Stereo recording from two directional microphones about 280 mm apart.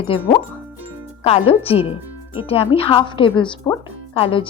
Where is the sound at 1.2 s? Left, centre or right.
Centre.